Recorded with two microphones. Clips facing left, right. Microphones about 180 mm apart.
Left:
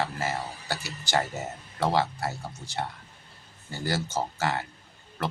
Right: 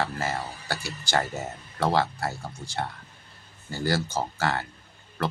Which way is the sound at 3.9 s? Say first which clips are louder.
Right 2 dB; 20° left (ahead or behind).